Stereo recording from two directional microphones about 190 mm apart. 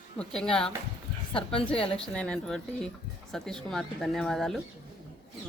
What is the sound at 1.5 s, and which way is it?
Speech, 30° left (ahead or behind).